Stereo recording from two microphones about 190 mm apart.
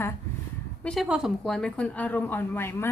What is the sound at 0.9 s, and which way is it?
A woman's voice, 5° right (ahead or behind).